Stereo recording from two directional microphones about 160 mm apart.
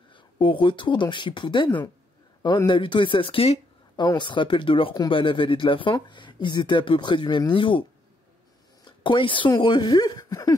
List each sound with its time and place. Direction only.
0.1 s speech: 30° left (ahead or behind)
8.8 s speech: 30° left (ahead or behind)